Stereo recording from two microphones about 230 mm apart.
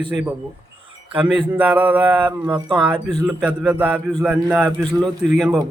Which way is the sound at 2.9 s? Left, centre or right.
Centre.